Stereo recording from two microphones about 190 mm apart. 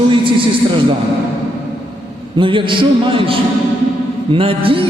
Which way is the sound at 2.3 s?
25° right (ahead or behind).